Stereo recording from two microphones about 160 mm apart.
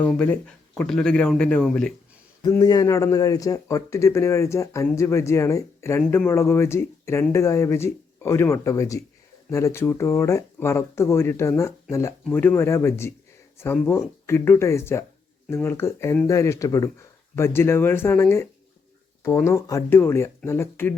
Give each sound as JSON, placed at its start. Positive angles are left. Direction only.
{"t": 0.0, "sound": "speech", "side_deg": 10}
{"t": 2.4, "sound": "speech", "side_deg": 25}
{"t": 19.5, "sound": "speech", "side_deg": 20}